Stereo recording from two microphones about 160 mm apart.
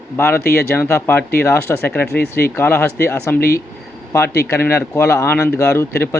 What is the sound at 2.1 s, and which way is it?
Speech, 85° left.